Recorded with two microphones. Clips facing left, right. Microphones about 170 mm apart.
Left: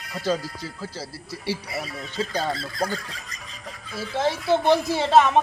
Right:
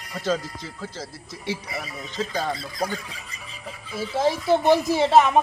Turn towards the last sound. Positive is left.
turn(degrees=-10)  # may be behind; listen again after turning